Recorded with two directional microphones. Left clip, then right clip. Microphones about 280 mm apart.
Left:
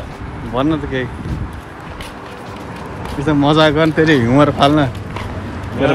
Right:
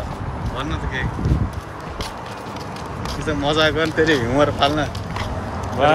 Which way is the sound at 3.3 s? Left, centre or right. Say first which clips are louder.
Left 6 dB; centre.